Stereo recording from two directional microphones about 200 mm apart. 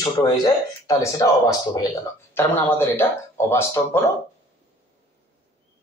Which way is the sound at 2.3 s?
10° left (ahead or behind).